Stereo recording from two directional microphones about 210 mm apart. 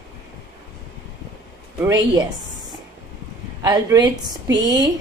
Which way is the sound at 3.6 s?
15° right (ahead or behind).